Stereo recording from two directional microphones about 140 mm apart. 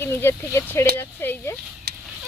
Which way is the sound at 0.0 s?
15° left (ahead or behind).